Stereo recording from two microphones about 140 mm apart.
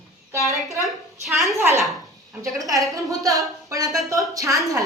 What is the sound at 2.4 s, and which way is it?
Speech, 25° right (ahead or behind).